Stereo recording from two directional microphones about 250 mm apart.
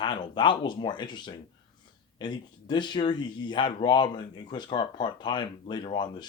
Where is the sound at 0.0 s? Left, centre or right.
Centre.